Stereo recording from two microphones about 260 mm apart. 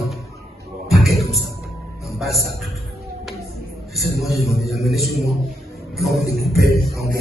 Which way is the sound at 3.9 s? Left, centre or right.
Centre.